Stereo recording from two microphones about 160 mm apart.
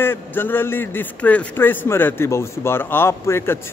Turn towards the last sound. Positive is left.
turn(degrees=15)  # may be behind; listen again after turning